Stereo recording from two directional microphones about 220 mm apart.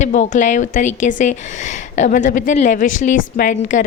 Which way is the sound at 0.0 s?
35° left (ahead or behind).